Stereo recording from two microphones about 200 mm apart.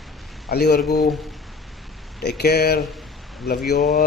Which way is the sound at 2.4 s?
55° left (ahead or behind).